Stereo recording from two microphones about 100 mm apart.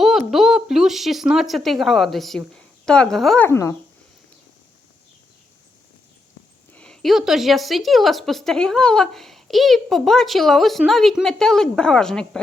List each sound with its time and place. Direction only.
0.0 s speech: 5° right (ahead or behind)
3.3 s speech: 20° left (ahead or behind)
6.7 s speech: 5° left (ahead or behind)